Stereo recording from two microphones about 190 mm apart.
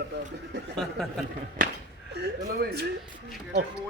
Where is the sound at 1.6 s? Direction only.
45° right (ahead or behind).